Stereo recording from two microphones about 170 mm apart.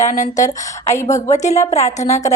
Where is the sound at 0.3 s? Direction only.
20° left (ahead or behind).